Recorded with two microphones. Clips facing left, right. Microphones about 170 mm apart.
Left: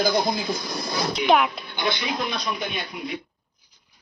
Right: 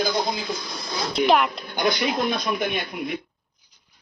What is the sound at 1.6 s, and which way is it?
Speech, 45° right (ahead or behind).